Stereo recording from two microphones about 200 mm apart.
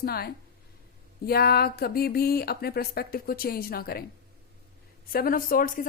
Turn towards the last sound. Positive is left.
turn(degrees=45)  # may be behind; listen again after turning